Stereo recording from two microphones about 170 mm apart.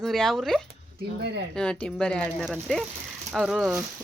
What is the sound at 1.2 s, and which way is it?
Speech, 75° right (ahead or behind).